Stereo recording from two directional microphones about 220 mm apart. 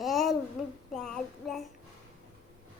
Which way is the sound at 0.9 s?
Centre (ahead or behind).